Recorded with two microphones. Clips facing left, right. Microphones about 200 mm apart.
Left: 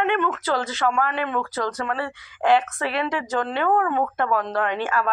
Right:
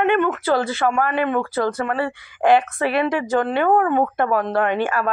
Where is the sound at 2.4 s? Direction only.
15° right (ahead or behind).